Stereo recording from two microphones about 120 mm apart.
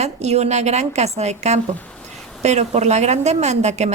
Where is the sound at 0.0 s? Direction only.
65° right (ahead or behind).